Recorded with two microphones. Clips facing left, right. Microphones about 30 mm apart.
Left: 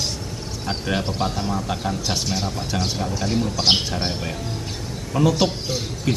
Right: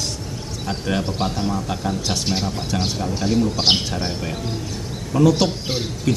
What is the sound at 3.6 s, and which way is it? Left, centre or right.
Speech, centre.